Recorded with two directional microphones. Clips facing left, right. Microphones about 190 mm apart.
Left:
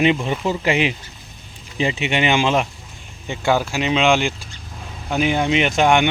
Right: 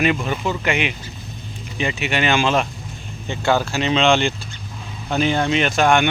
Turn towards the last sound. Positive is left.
turn(degrees=15)  # may be behind; listen again after turning